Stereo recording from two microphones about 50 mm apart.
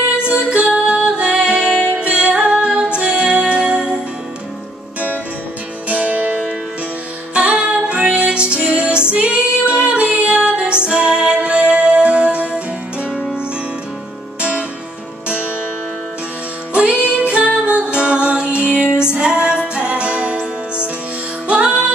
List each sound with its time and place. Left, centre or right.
0.3 s music: right
5.9 s music: right
7.3 s music: right
9.1 s female singing: right
10.2 s music: right
13.1 s music: centre
17.1 s music: right
21.5 s music: right